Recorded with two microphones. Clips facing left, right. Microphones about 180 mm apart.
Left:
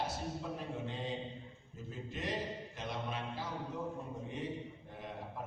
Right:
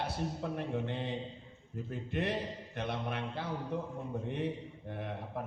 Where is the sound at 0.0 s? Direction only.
60° right (ahead or behind).